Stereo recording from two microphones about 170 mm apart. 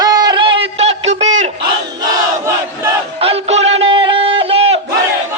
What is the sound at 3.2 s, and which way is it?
Music, 35° right (ahead or behind).